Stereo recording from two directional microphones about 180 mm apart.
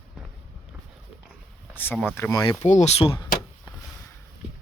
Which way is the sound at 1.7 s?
10° left (ahead or behind).